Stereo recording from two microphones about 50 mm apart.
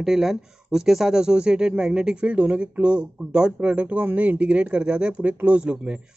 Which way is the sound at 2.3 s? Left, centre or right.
Right.